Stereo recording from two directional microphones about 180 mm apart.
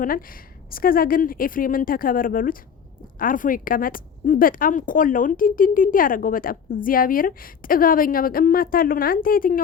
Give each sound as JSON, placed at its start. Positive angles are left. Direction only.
{"t": 0.0, "sound": "a woman's voice", "side_deg": 50}